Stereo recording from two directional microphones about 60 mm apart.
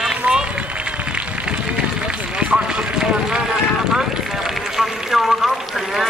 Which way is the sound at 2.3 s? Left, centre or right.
Centre.